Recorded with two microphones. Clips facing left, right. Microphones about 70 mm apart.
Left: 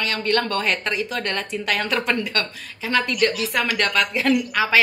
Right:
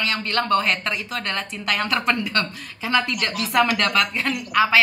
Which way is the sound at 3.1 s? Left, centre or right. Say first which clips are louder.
Left 5 dB; right.